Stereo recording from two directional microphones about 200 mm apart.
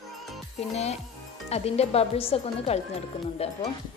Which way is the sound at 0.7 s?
30° left (ahead or behind).